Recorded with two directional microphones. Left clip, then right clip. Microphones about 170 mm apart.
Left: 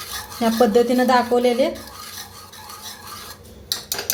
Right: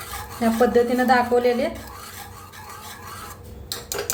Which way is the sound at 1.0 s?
35° left (ahead or behind).